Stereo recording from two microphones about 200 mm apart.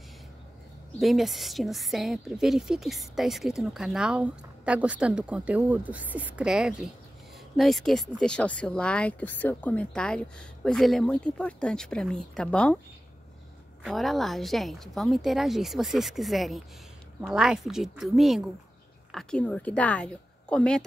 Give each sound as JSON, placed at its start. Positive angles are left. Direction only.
{"t": 0.9, "sound": "a woman's voice", "side_deg": 0}
{"t": 13.8, "sound": "a woman's voice", "side_deg": 0}